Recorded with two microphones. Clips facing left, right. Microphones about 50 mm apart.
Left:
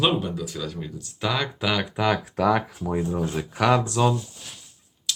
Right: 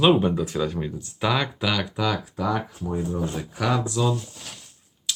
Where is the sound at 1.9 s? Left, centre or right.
Left.